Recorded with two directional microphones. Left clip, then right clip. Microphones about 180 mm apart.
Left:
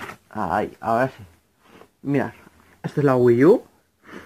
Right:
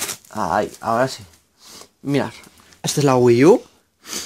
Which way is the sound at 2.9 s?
50° right (ahead or behind).